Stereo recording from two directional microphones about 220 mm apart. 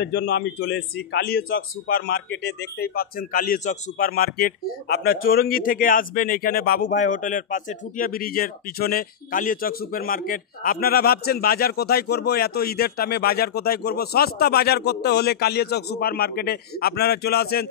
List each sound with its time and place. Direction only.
0.0 s a man's voice: 50° left (ahead or behind)